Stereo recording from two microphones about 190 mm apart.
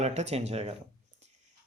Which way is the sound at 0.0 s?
35° right (ahead or behind).